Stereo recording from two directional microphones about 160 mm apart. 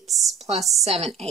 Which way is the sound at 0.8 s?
40° right (ahead or behind).